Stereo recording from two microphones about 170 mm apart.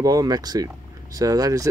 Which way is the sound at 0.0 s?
20° right (ahead or behind).